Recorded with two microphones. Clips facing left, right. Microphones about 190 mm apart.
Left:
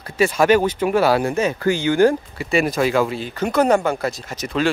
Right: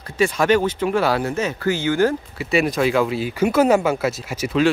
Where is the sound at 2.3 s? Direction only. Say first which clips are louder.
Even; centre (ahead or behind).